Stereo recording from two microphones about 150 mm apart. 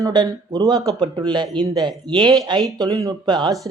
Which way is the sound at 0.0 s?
30° right (ahead or behind).